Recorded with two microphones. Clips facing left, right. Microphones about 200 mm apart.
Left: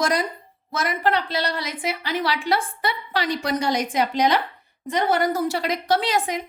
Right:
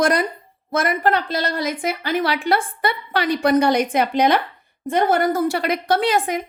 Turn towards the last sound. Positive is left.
turn(degrees=-55)  # may be behind; listen again after turning